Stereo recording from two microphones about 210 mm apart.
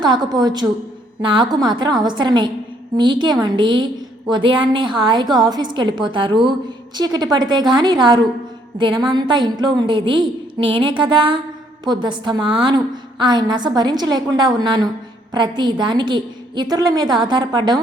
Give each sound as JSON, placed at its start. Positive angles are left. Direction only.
{"t": 0.0, "sound": "a woman's voice", "side_deg": -20}